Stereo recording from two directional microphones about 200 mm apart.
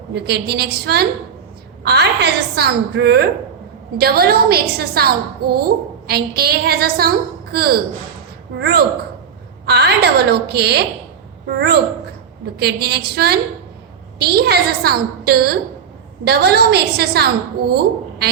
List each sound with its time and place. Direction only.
0.1 s a woman's voice: 55° right (ahead or behind)
9.6 s a woman's voice: 55° right (ahead or behind)
12.5 s a woman's voice: 55° right (ahead or behind)